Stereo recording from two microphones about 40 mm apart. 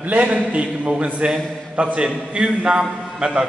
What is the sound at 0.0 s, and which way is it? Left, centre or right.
A man's voice, right.